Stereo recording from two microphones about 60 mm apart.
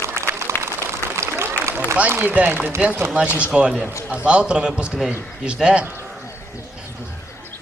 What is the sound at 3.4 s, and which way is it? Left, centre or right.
A man's voice, centre.